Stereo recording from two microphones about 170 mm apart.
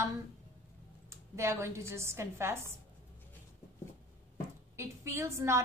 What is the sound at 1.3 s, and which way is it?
A woman's voice, 15° right (ahead or behind).